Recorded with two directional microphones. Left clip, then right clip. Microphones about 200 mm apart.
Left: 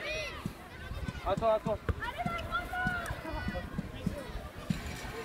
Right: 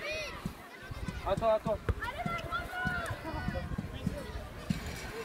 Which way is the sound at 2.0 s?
50° right (ahead or behind).